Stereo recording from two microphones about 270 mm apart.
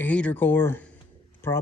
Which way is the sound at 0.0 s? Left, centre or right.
Centre.